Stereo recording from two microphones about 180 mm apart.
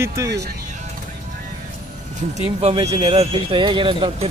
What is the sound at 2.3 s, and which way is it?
Speech, 35° right (ahead or behind).